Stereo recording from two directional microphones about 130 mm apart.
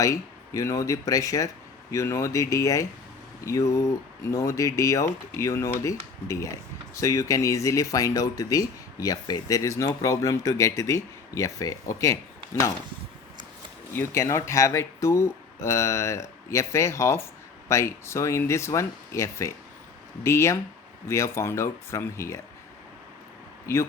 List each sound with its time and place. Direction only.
0.0 s speech: 25° left (ahead or behind)
13.9 s speech: 20° left (ahead or behind)
23.7 s speech: 20° left (ahead or behind)